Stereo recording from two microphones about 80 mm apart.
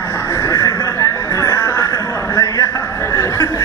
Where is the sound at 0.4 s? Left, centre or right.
Left.